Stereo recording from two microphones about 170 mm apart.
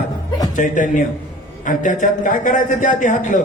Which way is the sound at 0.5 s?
50° left (ahead or behind).